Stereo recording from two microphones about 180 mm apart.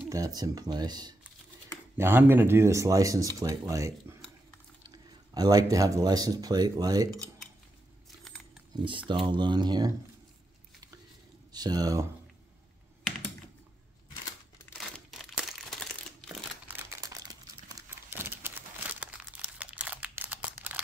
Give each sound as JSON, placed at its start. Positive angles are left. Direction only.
{"t": 0.1, "sound": "speech", "side_deg": -20}
{"t": 2.0, "sound": "speech", "side_deg": -10}
{"t": 8.8, "sound": "speech", "side_deg": -25}
{"t": 11.5, "sound": "speech", "side_deg": -20}
{"t": 14.8, "sound": "crumpling", "side_deg": 0}
{"t": 16.6, "sound": "crumpling", "side_deg": -15}